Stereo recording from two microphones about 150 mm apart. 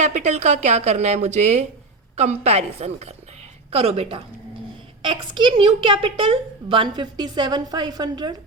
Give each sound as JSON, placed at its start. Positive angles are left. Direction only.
{"t": 0.0, "sound": "a woman's voice", "side_deg": -50}